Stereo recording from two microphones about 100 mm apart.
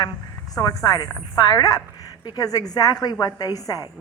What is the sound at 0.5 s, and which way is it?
A woman's voice, 35° left (ahead or behind).